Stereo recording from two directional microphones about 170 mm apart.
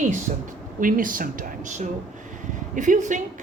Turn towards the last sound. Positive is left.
turn(degrees=-45)  # may be behind; listen again after turning